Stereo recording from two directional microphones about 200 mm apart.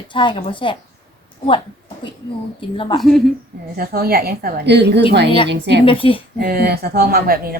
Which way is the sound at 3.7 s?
50° right (ahead or behind).